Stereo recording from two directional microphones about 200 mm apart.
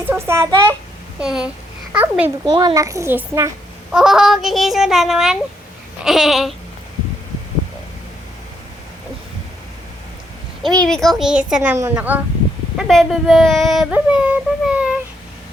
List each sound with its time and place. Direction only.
0.0 s a child's voice: 10° right (ahead or behind)
2.5 s a child's voice: 20° right (ahead or behind)
3.9 s speech: centre (ahead or behind)
10.8 s speech: centre (ahead or behind)